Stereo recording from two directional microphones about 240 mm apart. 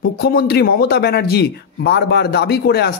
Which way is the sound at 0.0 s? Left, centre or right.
Left.